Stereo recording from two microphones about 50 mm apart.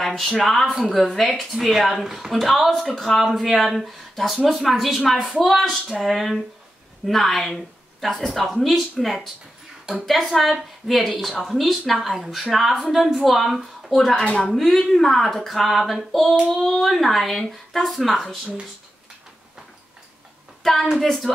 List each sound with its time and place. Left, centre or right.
0.0 s speech: centre
14.1 s speech: centre
14.5 s speech: centre
20.6 s speech: centre